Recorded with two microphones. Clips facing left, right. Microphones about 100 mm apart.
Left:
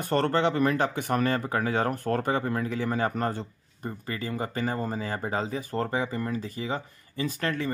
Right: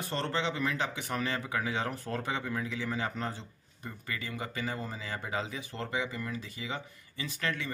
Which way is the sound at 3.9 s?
35° left (ahead or behind).